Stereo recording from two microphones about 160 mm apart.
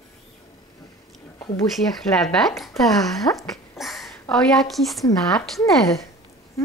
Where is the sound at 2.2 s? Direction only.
Centre (ahead or behind).